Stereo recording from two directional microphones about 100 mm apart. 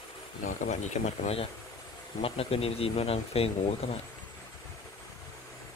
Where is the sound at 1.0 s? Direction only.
80° left.